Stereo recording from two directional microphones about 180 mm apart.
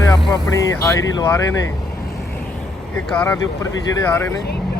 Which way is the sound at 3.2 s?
15° left (ahead or behind).